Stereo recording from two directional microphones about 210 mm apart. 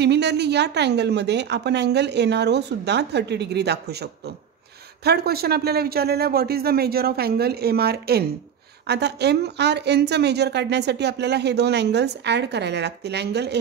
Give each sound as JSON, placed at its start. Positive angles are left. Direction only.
{"t": 0.0, "sound": "a woman's voice", "side_deg": -55}